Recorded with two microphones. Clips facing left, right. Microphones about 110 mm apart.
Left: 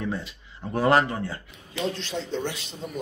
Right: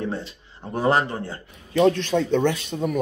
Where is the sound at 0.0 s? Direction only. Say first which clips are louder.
Right 2 dB; 30° right (ahead or behind).